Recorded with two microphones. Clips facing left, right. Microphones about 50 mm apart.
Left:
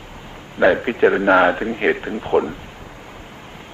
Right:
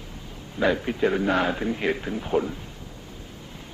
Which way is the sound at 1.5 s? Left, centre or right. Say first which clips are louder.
Left 6 dB; left.